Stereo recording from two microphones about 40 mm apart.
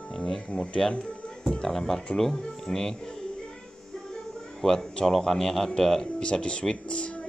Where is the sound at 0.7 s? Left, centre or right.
Centre.